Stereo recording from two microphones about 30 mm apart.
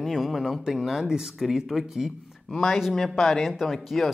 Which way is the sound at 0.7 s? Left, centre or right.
Centre.